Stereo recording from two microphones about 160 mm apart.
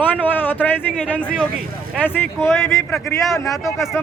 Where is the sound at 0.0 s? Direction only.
10° left (ahead or behind).